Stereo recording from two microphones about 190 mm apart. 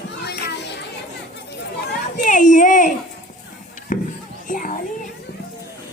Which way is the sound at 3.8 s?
40° left (ahead or behind).